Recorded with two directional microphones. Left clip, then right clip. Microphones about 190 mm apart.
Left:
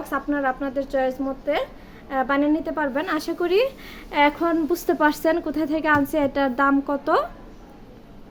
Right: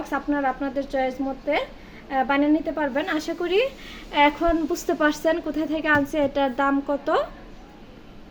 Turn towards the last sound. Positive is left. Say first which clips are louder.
# left 2 dB
turn(degrees=10)  # may be behind; listen again after turning